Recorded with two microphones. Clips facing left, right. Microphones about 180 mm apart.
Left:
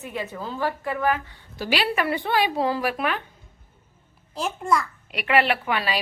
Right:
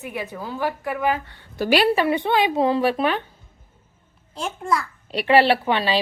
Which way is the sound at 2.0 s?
20° right (ahead or behind).